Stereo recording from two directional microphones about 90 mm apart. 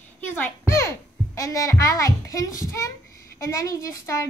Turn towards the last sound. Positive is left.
turn(degrees=35)  # may be behind; listen again after turning